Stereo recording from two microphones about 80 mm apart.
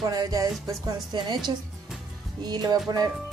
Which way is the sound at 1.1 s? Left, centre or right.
Right.